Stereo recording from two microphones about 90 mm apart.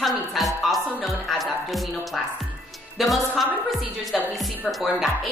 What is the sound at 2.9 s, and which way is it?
A woman's voice, centre (ahead or behind).